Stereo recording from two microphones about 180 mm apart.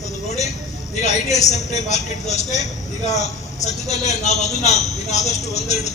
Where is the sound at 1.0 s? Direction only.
40° left (ahead or behind).